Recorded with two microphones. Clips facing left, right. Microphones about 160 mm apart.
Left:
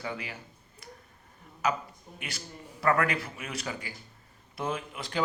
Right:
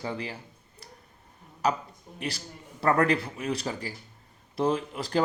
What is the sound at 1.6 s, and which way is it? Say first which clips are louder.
A man's voice: right 2 dB; 35° right (ahead or behind).